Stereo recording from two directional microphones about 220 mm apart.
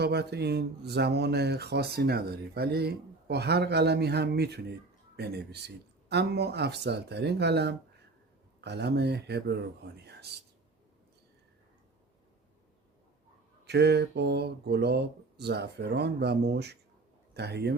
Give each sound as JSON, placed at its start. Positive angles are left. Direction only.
{"t": 0.0, "sound": "speech", "side_deg": -50}
{"t": 13.7, "sound": "speech", "side_deg": -50}